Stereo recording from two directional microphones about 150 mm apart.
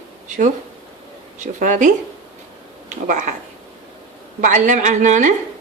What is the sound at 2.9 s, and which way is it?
Speech, 55° right (ahead or behind).